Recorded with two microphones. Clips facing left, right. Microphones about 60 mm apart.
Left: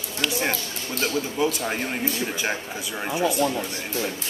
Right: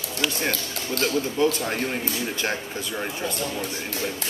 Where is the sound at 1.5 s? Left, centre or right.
Centre.